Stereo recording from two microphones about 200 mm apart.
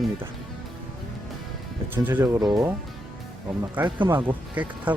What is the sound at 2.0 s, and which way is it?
Speech, 10° right (ahead or behind).